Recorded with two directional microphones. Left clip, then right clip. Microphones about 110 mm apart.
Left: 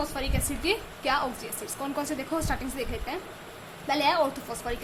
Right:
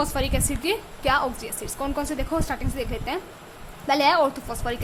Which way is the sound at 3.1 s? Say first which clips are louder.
Right 5 dB; 40° right (ahead or behind).